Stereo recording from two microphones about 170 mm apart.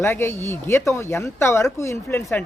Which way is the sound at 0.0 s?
15° left (ahead or behind).